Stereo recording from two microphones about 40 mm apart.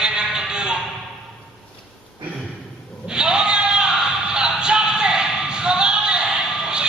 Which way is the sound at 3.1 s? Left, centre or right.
Centre.